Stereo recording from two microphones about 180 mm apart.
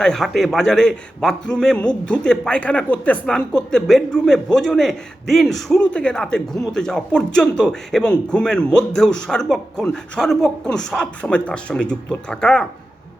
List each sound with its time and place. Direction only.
0.0 s a man's voice: centre (ahead or behind)